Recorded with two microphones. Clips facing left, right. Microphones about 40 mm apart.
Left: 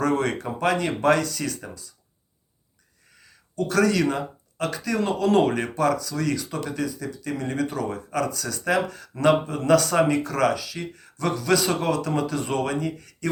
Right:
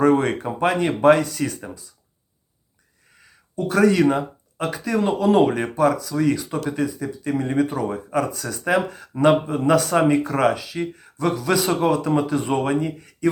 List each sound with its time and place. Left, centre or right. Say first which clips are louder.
0.0 s speech: right 6 dB; right
3.2 s speech: right 1 dB; right